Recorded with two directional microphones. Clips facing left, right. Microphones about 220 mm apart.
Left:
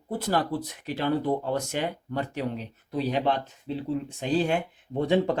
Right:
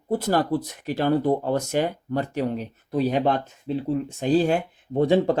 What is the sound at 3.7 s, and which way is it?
Speech, 50° right (ahead or behind).